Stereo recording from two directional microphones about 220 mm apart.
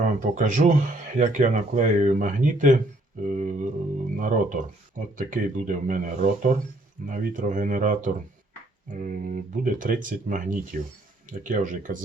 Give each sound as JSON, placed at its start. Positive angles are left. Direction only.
{"t": 0.0, "sound": "speech", "side_deg": -35}